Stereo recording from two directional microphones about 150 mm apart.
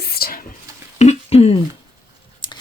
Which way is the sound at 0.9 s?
45° left (ahead or behind).